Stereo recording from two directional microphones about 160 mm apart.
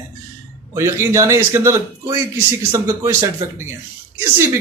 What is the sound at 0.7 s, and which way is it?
A man's voice, 15° right (ahead or behind).